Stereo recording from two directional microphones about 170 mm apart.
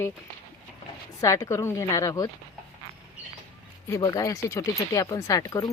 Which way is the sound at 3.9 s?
20° left (ahead or behind).